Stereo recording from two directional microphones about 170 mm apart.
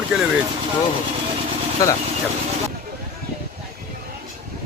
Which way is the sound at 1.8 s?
20° left (ahead or behind).